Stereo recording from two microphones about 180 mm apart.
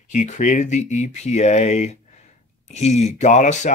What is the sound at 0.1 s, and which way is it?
Speech, 45° left (ahead or behind).